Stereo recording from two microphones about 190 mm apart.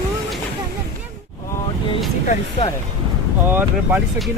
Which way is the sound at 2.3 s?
30° left (ahead or behind).